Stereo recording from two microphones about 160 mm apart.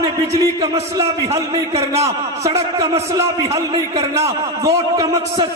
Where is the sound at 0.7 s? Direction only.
20° right (ahead or behind).